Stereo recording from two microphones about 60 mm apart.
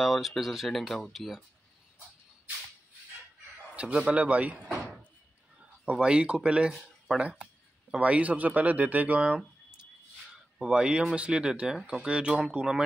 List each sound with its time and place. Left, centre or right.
0.0 s speech: centre
3.8 s a man's voice: right
5.9 s speech: centre
10.6 s speech: centre